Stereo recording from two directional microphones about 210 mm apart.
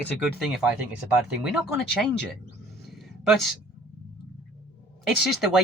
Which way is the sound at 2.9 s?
Centre (ahead or behind).